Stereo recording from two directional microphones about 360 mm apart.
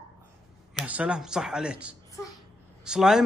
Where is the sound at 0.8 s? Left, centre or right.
Centre.